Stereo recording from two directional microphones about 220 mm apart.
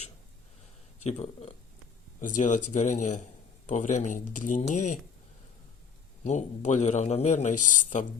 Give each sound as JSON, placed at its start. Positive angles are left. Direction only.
{"t": 1.2, "sound": "a man's voice", "side_deg": 30}
{"t": 6.2, "sound": "a man's voice", "side_deg": 30}